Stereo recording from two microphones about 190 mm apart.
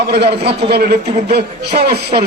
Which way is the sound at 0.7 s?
55° right (ahead or behind).